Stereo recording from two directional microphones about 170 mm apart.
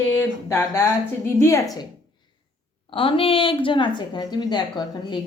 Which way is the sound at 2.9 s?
30° left (ahead or behind).